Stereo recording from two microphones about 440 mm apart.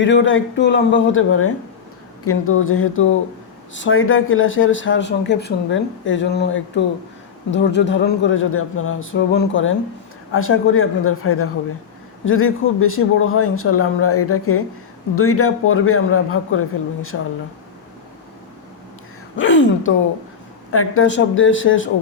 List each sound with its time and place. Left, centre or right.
0.0 s speech: left
19.4 s speech: left